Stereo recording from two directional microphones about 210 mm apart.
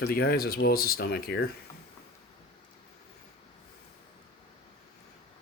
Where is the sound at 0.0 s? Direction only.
45° left (ahead or behind).